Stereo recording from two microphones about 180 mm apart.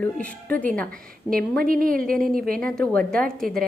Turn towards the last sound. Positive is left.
turn(degrees=5)  # may be behind; listen again after turning